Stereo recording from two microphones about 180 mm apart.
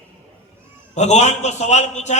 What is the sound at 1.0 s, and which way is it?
A man's voice, 40° left (ahead or behind).